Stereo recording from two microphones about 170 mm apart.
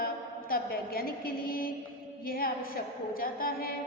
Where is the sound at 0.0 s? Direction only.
60° left (ahead or behind).